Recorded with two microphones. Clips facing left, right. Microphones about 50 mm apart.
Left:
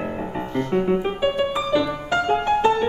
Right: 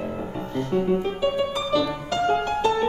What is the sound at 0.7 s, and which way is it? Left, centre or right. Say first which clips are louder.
Music: left 1 dB; left.